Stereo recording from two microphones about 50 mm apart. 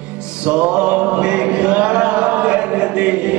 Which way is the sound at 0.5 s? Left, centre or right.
Right.